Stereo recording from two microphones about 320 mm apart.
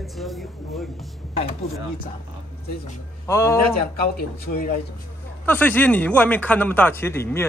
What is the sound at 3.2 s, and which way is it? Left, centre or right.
Speech, centre.